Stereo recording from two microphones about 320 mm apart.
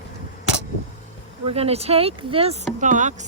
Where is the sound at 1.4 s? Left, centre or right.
Centre.